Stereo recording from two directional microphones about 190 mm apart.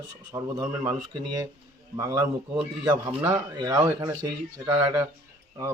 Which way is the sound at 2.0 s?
20° right (ahead or behind).